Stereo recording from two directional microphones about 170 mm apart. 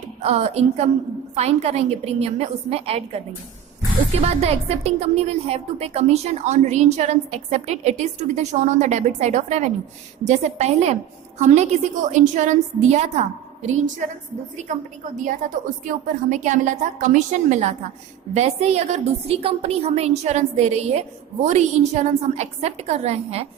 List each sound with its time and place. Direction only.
0.2 s a woman's voice: 40° right (ahead or behind)